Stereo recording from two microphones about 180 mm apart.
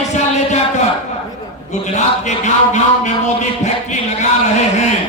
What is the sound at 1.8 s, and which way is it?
Speech, 40° left (ahead or behind).